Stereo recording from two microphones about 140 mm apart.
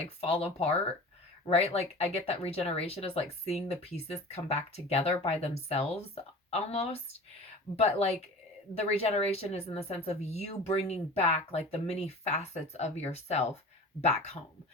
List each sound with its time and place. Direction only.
0.0 s speech: 45° left (ahead or behind)